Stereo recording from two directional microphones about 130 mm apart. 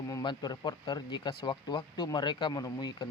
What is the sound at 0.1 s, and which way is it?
Speech, 30° left (ahead or behind).